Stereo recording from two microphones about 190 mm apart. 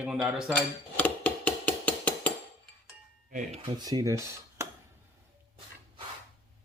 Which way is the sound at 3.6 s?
20° right (ahead or behind).